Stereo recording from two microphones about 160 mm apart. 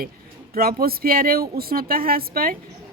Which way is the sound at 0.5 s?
65° right (ahead or behind).